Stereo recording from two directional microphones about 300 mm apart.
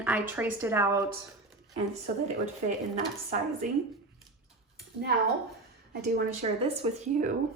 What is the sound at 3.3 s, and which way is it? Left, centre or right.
Speech, right.